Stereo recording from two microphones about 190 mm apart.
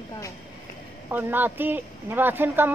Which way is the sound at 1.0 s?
10° right (ahead or behind).